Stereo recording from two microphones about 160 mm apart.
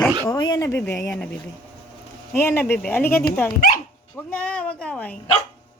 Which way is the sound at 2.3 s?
15° left (ahead or behind).